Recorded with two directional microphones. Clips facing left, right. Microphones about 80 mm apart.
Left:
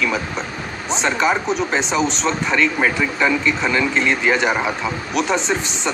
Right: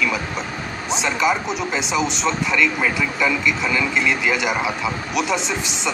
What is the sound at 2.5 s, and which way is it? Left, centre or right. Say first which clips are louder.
Speech: left 4 dB; left.